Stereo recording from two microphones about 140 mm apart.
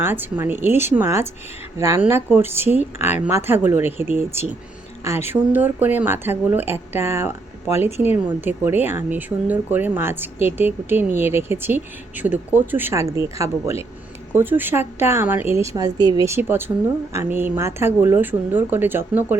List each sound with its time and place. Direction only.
0.0 s speech: 15° right (ahead or behind)